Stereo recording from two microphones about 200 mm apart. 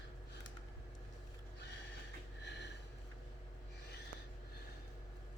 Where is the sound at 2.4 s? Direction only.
60° left (ahead or behind).